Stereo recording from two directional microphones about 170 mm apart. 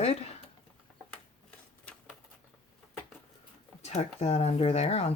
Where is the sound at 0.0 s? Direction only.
35° left (ahead or behind).